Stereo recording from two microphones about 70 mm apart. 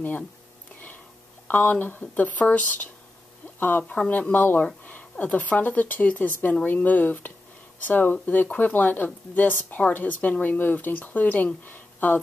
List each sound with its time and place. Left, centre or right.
1.5 s speech: left
3.9 s speech: centre